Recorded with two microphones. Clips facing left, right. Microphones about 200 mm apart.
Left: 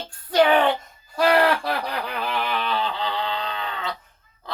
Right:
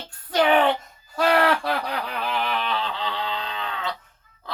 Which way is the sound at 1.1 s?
Centre (ahead or behind).